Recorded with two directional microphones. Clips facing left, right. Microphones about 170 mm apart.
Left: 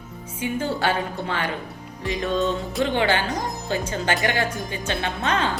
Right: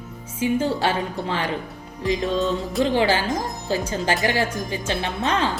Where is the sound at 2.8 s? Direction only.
30° right (ahead or behind).